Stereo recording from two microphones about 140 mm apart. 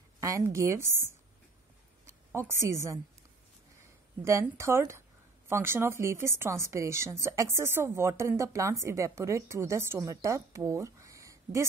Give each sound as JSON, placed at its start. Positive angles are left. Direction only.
{"t": 0.2, "sound": "a woman's voice", "side_deg": -20}
{"t": 4.2, "sound": "a woman's voice", "side_deg": -20}